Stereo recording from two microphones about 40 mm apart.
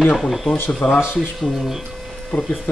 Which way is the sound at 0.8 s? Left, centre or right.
Left.